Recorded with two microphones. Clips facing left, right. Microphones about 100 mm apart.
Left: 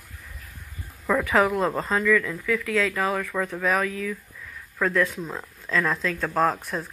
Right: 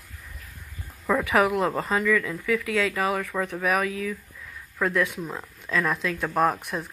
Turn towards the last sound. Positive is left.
turn(degrees=-15)  # may be behind; listen again after turning